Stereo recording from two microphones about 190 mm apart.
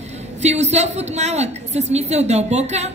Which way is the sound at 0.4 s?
35° right (ahead or behind).